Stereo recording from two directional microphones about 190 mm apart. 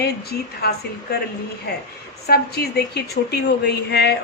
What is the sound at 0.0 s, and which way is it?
A woman's voice, 55° left (ahead or behind).